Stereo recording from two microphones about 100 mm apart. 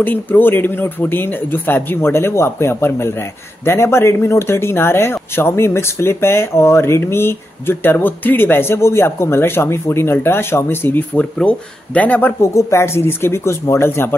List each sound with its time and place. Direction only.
0.0 s speech: 20° left (ahead or behind)
12.5 s speech: 30° left (ahead or behind)